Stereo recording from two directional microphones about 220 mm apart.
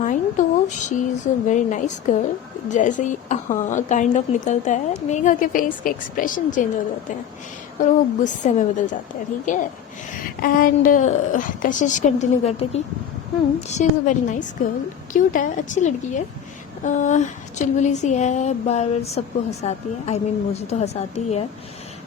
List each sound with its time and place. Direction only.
0.0 s a sound: 35° left (ahead or behind)
0.9 s a woman's voice: 35° left (ahead or behind)
7.8 s a woman's voice: 35° left (ahead or behind)